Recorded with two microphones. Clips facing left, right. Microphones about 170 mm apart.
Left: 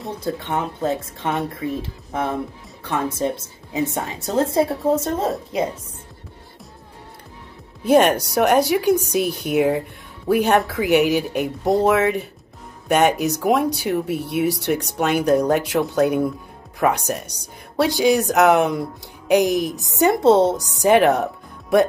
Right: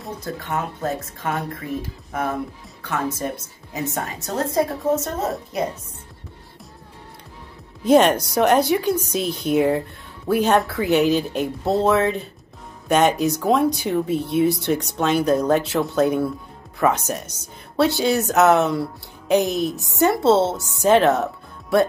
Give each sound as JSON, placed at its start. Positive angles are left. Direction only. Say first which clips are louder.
{"t": 0.2, "sound": "a woman's voice", "louder": "left 3 dB", "side_deg": 25}
{"t": 2.8, "sound": "a woman's voice", "louder": "left 3 dB", "side_deg": 30}
{"t": 7.8, "sound": "speech", "louder": "even", "side_deg": 10}
{"t": 14.4, "sound": "speech", "louder": "right 2 dB", "side_deg": 70}
{"t": 14.7, "sound": "speech", "louder": "even", "side_deg": 10}